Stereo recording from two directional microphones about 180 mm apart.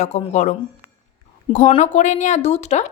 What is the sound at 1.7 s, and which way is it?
A woman's voice, 40° left (ahead or behind).